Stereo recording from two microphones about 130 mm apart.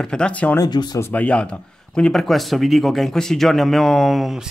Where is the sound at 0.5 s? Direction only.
30° left (ahead or behind).